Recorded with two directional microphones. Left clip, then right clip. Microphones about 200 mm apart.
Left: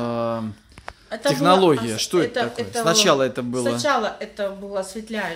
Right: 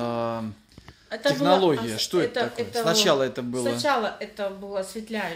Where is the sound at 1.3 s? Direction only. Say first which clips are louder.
Left 4 dB; 30° left (ahead or behind).